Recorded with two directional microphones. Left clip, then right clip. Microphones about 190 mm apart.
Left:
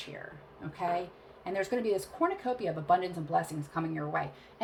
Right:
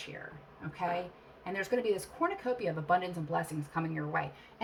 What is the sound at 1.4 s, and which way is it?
A woman's voice, 30° left (ahead or behind).